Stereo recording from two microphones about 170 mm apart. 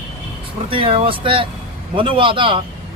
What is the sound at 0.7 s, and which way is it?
Speech, 30° right (ahead or behind).